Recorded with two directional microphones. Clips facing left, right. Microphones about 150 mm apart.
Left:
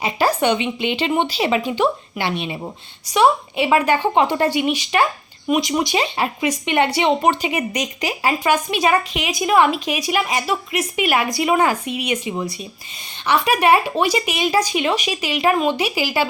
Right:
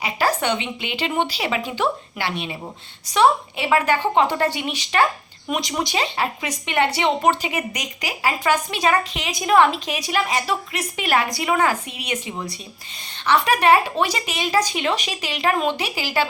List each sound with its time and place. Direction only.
0.0 s speech: 15° left (ahead or behind)